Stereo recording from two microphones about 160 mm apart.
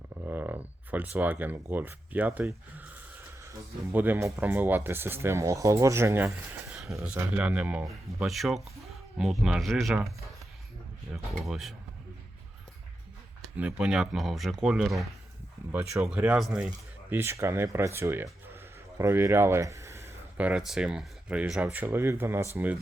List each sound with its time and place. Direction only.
0.3 s speech: 10° right (ahead or behind)
3.9 s speech: 10° right (ahead or behind)
11.4 s speech: centre (ahead or behind)
13.6 s speech: 5° right (ahead or behind)
15.7 s speech: 15° right (ahead or behind)